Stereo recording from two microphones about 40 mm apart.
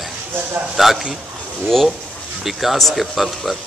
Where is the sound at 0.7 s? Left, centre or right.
Centre.